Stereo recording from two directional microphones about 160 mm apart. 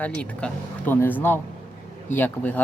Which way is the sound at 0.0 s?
10° left (ahead or behind).